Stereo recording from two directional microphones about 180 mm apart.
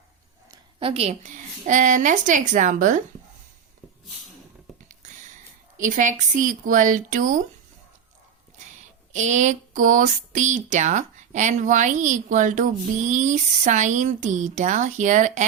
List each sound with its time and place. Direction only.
0.5 s speech: 30° right (ahead or behind)
6.0 s speech: 45° right (ahead or behind)
9.1 s speech: 40° right (ahead or behind)